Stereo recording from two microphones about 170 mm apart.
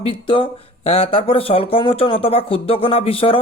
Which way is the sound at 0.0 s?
30° left (ahead or behind).